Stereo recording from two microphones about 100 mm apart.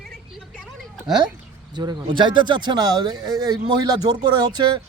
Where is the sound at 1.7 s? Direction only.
50° right (ahead or behind).